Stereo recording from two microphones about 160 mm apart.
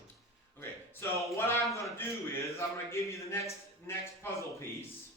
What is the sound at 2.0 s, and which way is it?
A man's voice, 15° left (ahead or behind).